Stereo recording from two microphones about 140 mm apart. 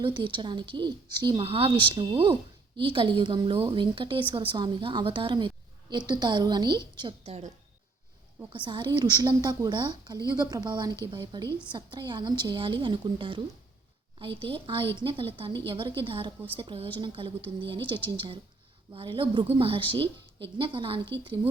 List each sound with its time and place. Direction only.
0.0 s a woman's voice: 35° right (ahead or behind)
7.3 s a woman's voice: 50° right (ahead or behind)
8.5 s a woman's voice: 35° right (ahead or behind)